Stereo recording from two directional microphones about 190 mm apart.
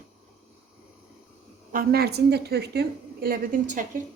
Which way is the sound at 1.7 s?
50° right (ahead or behind).